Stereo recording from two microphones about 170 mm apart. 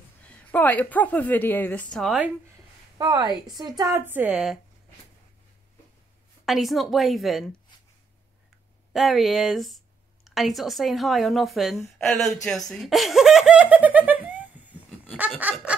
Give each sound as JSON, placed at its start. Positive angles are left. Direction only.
{"t": 0.3, "sound": "a woman's voice", "side_deg": 10}
{"t": 3.0, "sound": "a woman's voice", "side_deg": -25}
{"t": 3.9, "sound": "a woman's voice", "side_deg": -10}
{"t": 6.4, "sound": "a woman's voice", "side_deg": 0}
{"t": 8.9, "sound": "a woman's voice", "side_deg": 0}
{"t": 15.1, "sound": "a sound", "side_deg": -10}